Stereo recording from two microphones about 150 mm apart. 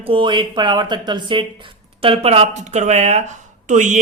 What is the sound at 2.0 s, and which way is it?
A man's voice, 40° right (ahead or behind).